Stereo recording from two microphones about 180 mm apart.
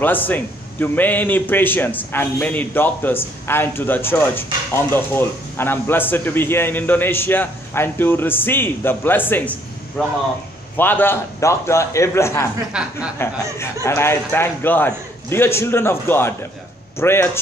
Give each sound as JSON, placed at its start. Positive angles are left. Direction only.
{"t": 0.0, "sound": "a man's voice", "side_deg": 10}
{"t": 12.7, "sound": "speech", "side_deg": -5}
{"t": 13.2, "sound": "a man's voice", "side_deg": 15}